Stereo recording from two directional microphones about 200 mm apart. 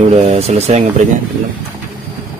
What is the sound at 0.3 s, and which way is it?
Speech, 30° right (ahead or behind).